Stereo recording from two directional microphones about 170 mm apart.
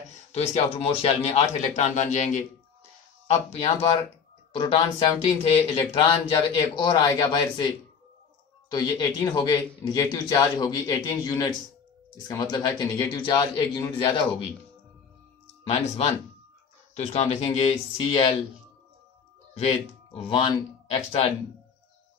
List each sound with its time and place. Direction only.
0.3 s a man's voice: 40° left (ahead or behind)
8.7 s a man's voice: 25° left (ahead or behind)
15.6 s speech: 40° left (ahead or behind)
19.5 s speech: 40° left (ahead or behind)